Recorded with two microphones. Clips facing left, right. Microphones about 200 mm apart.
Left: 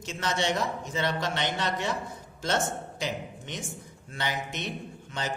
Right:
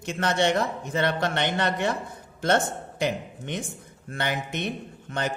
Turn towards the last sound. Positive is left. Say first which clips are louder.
# right 4 dB
turn(degrees=-55)  # may be behind; listen again after turning